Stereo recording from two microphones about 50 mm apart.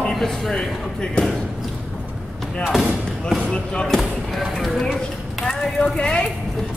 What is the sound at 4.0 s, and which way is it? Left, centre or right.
Speech, centre.